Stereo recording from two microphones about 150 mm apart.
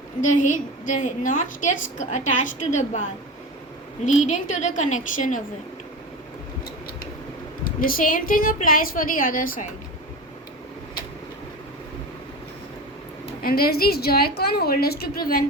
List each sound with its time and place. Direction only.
0.2 s a woman's voice: 55° left (ahead or behind)
4.0 s a woman's voice: 50° left (ahead or behind)
7.6 s a woman's voice: 70° left (ahead or behind)
13.4 s a woman's voice: 90° left